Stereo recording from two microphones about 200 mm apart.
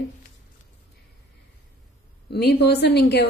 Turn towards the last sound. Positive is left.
turn(degrees=55)  # may be behind; listen again after turning